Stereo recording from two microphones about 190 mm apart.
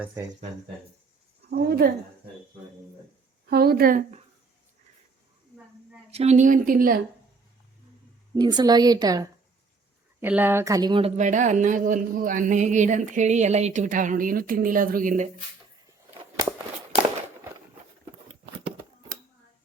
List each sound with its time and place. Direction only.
1.5 s a sound: 60° right (ahead or behind)
3.5 s speech: 55° right (ahead or behind)
6.1 s speech: 35° right (ahead or behind)
8.4 s a woman's voice: 20° right (ahead or behind)
11.2 s a man's voice: 40° right (ahead or behind)